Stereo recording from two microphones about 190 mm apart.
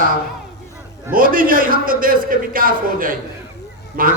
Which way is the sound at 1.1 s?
45° right (ahead or behind).